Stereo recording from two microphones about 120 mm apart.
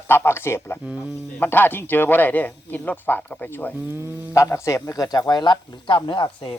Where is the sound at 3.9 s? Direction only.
20° right (ahead or behind).